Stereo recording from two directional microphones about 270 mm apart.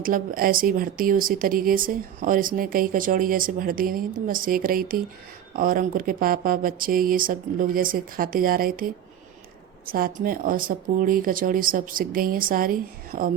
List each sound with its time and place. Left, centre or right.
0.0 s speech: right